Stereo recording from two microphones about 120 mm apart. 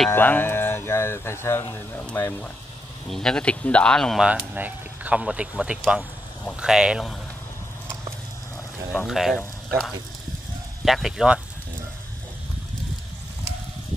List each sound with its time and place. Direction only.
0.1 s speech: 15° left (ahead or behind)
3.1 s speech: 5° left (ahead or behind)
4.2 s speech: 10° right (ahead or behind)
8.9 s speech: centre (ahead or behind)
10.9 s speech: 5° right (ahead or behind)